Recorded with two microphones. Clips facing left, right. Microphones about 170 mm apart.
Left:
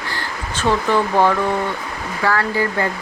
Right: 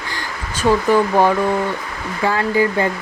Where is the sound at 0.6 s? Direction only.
10° right (ahead or behind).